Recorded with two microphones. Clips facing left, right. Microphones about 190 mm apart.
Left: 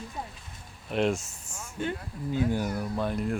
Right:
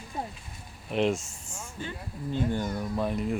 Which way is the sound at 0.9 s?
Centre (ahead or behind).